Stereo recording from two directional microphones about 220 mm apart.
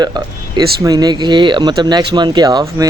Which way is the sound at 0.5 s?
20° right (ahead or behind).